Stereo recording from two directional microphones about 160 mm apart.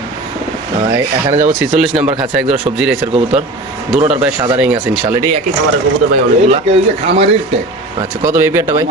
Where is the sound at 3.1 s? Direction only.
35° right (ahead or behind).